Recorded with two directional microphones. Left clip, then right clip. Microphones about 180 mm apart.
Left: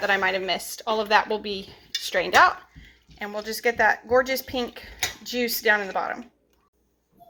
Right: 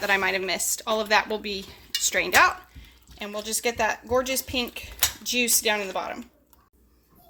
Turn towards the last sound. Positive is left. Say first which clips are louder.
# left 4 dB
turn(degrees=-20)  # may be behind; listen again after turning